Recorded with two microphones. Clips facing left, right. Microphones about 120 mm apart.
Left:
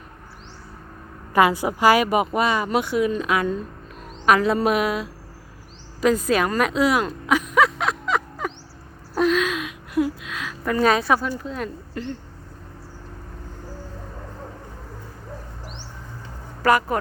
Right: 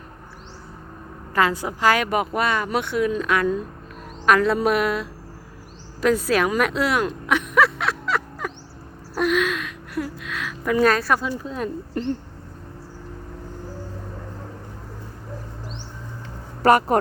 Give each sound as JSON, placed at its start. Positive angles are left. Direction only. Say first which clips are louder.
{"t": 1.3, "sound": "speech", "louder": "left 3 dB", "side_deg": 15}
{"t": 6.6, "sound": "a sound", "louder": "left 1 dB", "side_deg": 0}
{"t": 11.2, "sound": "speech", "louder": "even", "side_deg": -15}
{"t": 11.6, "sound": "speech", "louder": "right 4 dB", "side_deg": -25}